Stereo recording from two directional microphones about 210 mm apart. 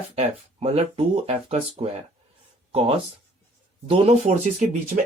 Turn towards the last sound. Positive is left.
turn(degrees=-35)  # may be behind; listen again after turning